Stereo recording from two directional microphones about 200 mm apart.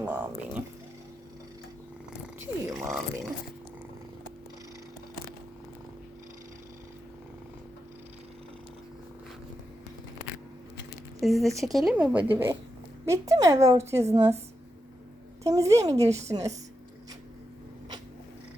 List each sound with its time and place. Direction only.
0.0 s a woman's voice: 10° right (ahead or behind)
2.4 s speech: 15° right (ahead or behind)
11.2 s a woman's voice: centre (ahead or behind)
15.4 s a woman's voice: 15° right (ahead or behind)